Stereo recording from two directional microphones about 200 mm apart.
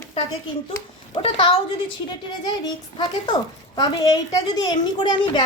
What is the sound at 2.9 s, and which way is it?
A woman's voice, 20° left (ahead or behind).